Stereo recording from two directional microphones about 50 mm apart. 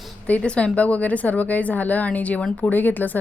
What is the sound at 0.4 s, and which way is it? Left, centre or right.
A woman's voice, left.